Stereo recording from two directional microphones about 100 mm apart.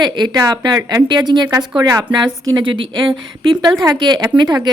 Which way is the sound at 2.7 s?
60° right (ahead or behind).